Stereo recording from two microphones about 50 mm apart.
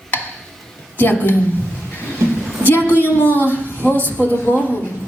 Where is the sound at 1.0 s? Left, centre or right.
Left.